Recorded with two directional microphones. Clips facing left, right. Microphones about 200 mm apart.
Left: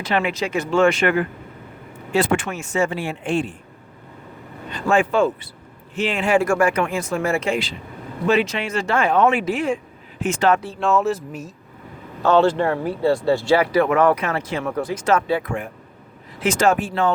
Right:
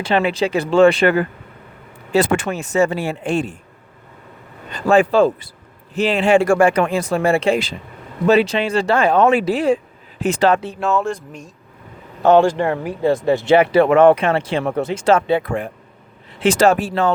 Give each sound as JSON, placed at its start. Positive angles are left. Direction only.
{"t": 0.0, "sound": "speech", "side_deg": -30}
{"t": 4.7, "sound": "speech", "side_deg": -35}
{"t": 10.8, "sound": "speech", "side_deg": 0}
{"t": 12.2, "sound": "speech", "side_deg": -15}